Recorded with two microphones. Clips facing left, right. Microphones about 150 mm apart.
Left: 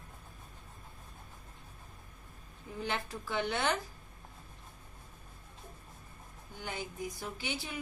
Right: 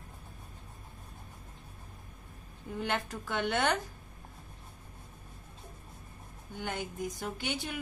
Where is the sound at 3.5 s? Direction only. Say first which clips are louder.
Right 4 dB; 55° right (ahead or behind).